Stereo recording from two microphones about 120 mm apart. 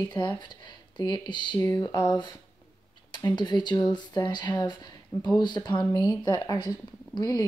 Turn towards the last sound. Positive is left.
turn(degrees=35)  # may be behind; listen again after turning